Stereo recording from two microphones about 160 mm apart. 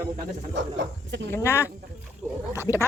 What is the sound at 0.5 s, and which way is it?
Speech, 90° right.